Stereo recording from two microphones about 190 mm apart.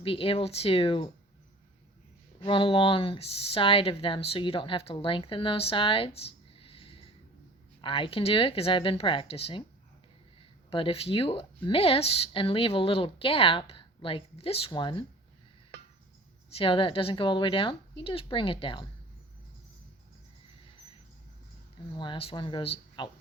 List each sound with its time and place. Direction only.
0.0 s speech: 30° left (ahead or behind)
2.4 s speech: 25° left (ahead or behind)
6.6 s a sound: 30° left (ahead or behind)
7.8 s speech: 25° left (ahead or behind)
10.7 s speech: 30° left (ahead or behind)
16.6 s speech: 25° left (ahead or behind)
21.9 s speech: 25° left (ahead or behind)